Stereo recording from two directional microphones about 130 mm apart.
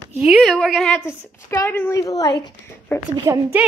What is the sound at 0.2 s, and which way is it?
Speech, centre (ahead or behind).